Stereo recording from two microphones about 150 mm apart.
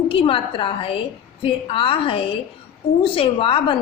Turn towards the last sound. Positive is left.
turn(degrees=35)  # may be behind; listen again after turning